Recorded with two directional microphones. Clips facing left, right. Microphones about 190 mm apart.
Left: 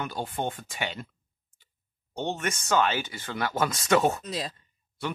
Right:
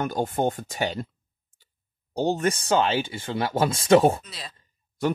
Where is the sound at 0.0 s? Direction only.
45° right (ahead or behind).